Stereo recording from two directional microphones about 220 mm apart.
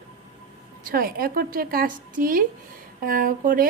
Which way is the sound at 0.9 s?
45° right (ahead or behind).